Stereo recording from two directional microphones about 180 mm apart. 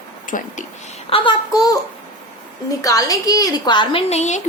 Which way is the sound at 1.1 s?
25° left (ahead or behind).